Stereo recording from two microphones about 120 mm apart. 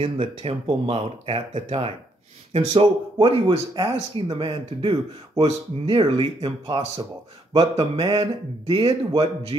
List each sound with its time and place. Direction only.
0.0 s a man's voice: 50° right (ahead or behind)